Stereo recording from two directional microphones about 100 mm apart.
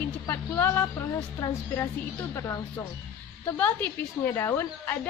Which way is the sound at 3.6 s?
15° left (ahead or behind).